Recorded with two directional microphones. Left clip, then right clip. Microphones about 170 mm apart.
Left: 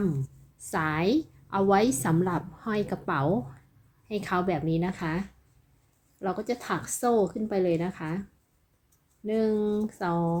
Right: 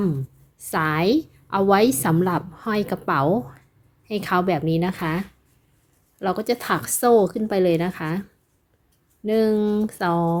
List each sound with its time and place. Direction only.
0.6 s a woman's voice: 35° right (ahead or behind)
9.2 s a woman's voice: 50° right (ahead or behind)